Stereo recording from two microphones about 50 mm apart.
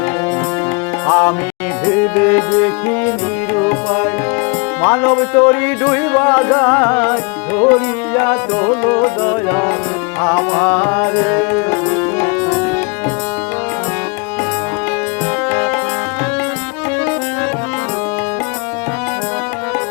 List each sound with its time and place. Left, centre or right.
1.0 s music: left